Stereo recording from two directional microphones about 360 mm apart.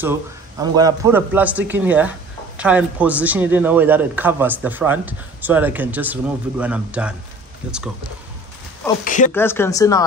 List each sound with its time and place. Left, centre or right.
0.0 s a man's voice: centre
9.0 s speech: left
9.3 s speech: centre